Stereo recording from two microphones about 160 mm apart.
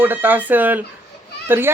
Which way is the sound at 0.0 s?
10° right (ahead or behind).